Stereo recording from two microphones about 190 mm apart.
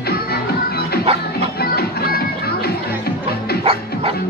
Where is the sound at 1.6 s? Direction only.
55° left (ahead or behind).